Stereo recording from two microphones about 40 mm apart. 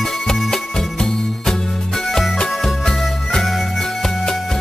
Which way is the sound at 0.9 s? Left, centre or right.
Centre.